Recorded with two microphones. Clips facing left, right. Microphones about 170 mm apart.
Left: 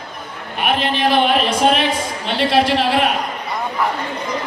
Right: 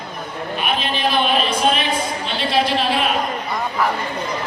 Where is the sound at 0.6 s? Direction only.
70° left (ahead or behind).